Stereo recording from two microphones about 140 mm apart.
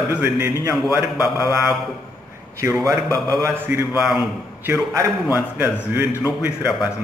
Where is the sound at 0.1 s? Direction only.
15° right (ahead or behind).